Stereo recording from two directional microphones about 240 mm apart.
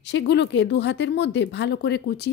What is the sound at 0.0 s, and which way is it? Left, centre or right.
Speech, left.